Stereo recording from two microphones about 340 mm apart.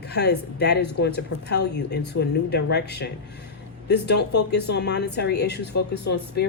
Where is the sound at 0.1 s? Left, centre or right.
Left.